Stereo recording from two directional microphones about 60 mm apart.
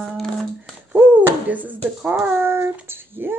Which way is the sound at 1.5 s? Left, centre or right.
Right.